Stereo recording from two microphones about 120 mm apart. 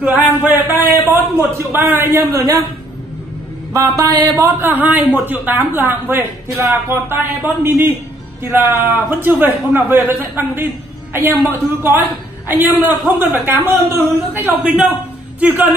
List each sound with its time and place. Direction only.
0.0 s a man's voice: 15° right (ahead or behind)
1.6 s a man's voice: 20° right (ahead or behind)
3.7 s a man's voice: 30° right (ahead or behind)